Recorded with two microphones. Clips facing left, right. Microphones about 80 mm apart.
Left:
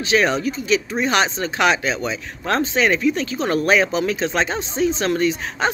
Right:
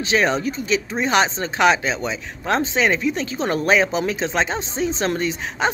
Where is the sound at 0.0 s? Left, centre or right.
Right.